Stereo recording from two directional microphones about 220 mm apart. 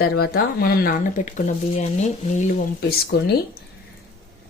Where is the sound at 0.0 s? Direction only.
45° left (ahead or behind).